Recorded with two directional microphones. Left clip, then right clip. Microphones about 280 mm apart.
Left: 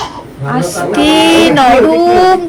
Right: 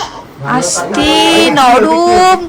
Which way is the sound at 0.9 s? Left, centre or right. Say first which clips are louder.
Left 1 dB; centre.